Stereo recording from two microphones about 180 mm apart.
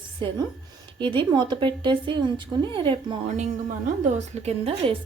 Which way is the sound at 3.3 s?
40° right (ahead or behind).